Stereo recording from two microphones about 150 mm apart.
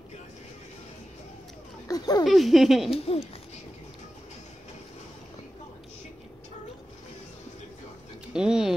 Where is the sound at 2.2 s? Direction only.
Centre (ahead or behind).